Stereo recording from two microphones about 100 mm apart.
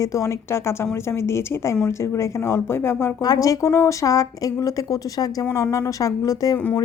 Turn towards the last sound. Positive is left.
turn(degrees=35)  # may be behind; listen again after turning